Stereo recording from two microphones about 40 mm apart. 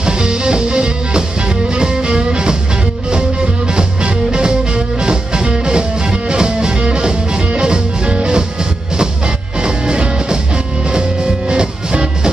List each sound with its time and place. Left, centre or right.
0.0 s music: right
9.6 s music: right